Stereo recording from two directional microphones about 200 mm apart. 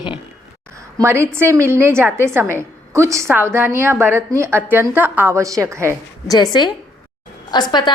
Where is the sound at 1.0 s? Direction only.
15° right (ahead or behind).